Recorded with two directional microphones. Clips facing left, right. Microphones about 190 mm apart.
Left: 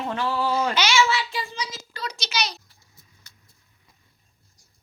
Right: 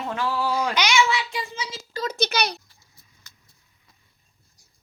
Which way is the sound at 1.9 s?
50° right (ahead or behind).